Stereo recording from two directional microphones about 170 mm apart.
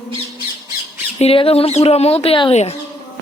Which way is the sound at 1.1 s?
35° left (ahead or behind).